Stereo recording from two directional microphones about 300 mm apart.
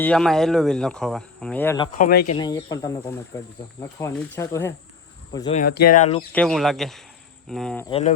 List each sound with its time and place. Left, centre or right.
0.0 s speech: centre
2.0 s speech: left
2.3 s speech: centre
5.5 s speech: left
6.3 s speech: centre
7.9 s speech: centre